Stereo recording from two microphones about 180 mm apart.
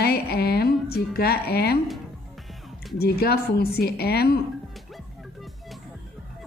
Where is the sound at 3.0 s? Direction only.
60° left (ahead or behind).